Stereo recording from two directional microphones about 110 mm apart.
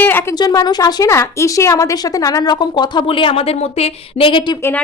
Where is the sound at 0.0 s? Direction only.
15° left (ahead or behind).